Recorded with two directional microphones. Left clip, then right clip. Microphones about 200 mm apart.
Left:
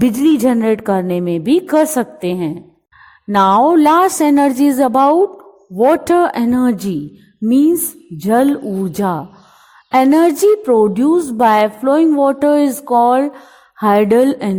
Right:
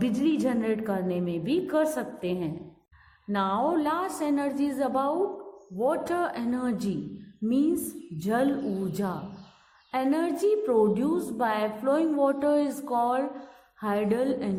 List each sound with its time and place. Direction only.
0.0 s a woman's voice: 45° left (ahead or behind)